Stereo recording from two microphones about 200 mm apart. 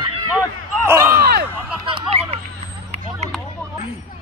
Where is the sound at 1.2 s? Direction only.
50° right (ahead or behind).